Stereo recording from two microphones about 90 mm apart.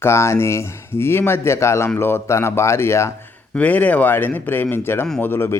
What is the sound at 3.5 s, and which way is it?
Speech, 15° left (ahead or behind).